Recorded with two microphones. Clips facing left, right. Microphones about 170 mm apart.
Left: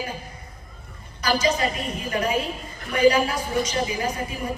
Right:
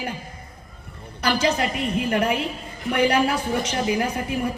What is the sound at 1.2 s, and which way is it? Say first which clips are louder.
A woman's voice: right 1 dB; 60° right (ahead or behind).